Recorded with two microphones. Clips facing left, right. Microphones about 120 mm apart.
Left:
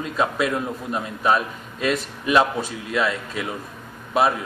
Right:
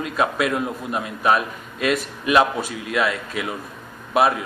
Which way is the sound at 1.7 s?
30° left (ahead or behind).